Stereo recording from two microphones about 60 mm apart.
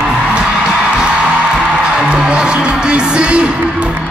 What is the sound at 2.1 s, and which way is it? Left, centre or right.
Speech, centre.